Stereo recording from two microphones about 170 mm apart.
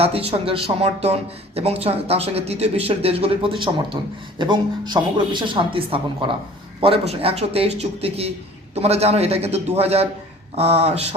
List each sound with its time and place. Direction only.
0.0 s speech: 35° right (ahead or behind)